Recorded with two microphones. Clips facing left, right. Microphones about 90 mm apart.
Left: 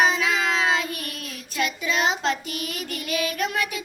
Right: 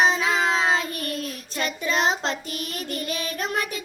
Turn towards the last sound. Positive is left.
turn(degrees=-35)  # may be behind; listen again after turning